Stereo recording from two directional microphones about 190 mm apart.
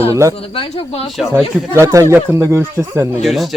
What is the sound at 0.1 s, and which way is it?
Speech, 15° right (ahead or behind).